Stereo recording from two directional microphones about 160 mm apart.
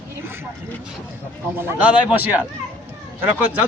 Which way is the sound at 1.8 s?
10° right (ahead or behind).